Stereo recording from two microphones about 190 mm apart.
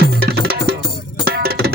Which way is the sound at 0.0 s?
55° right (ahead or behind).